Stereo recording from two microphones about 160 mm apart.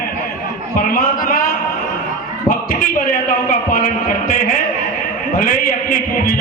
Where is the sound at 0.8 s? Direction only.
60° left (ahead or behind).